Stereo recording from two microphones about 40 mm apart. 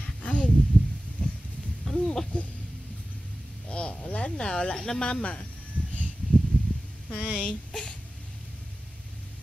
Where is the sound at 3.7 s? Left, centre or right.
Left.